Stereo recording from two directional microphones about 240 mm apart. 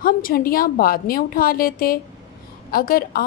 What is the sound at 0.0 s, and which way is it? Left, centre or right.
A woman's voice, left.